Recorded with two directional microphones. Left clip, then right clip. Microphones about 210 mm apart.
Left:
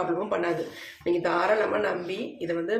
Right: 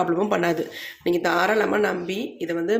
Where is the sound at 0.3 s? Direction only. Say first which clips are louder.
Right 5 dB; 45° right (ahead or behind).